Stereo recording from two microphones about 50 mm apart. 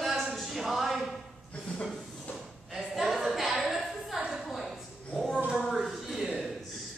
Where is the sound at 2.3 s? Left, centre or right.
Centre.